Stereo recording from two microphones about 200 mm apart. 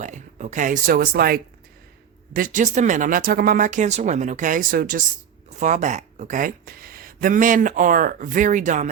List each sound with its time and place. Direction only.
0.0 s speech: 35° right (ahead or behind)